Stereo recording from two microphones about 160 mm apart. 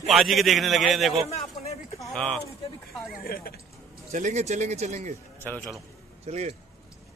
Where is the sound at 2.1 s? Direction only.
5° left (ahead or behind).